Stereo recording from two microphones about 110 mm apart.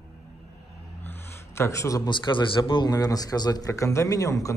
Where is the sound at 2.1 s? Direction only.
45° left (ahead or behind).